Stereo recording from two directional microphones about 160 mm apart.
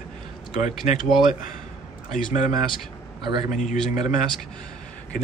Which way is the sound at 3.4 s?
55° left (ahead or behind).